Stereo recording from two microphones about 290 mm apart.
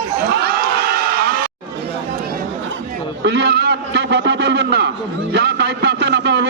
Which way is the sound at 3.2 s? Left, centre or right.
Right.